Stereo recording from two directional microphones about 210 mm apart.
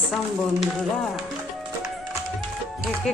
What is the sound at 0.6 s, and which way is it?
Music, centre (ahead or behind).